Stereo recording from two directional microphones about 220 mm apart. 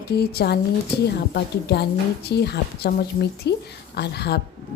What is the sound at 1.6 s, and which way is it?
Speech, 50° left (ahead or behind).